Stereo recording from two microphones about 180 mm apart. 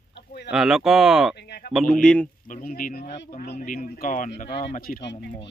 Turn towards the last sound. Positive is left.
turn(degrees=50)  # may be behind; listen again after turning